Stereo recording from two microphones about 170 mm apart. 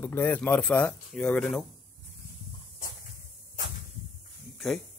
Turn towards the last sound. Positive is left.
turn(degrees=0)  # may be behind; listen again after turning